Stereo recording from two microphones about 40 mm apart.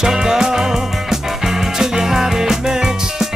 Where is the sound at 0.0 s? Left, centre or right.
Centre.